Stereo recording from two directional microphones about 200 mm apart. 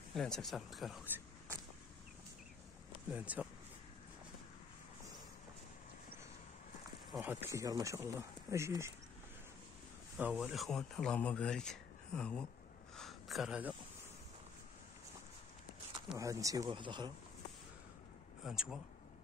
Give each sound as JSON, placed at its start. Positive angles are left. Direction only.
{"t": 0.1, "sound": "speech", "side_deg": 0}
{"t": 3.1, "sound": "speech", "side_deg": -5}
{"t": 7.1, "sound": "speech", "side_deg": -5}
{"t": 10.1, "sound": "speech", "side_deg": -5}
{"t": 12.9, "sound": "a sound", "side_deg": 0}
{"t": 16.2, "sound": "speech", "side_deg": -15}
{"t": 18.4, "sound": "speech", "side_deg": -5}